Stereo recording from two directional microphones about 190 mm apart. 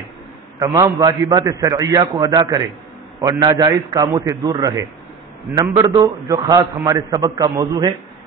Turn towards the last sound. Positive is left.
turn(degrees=-20)  # may be behind; listen again after turning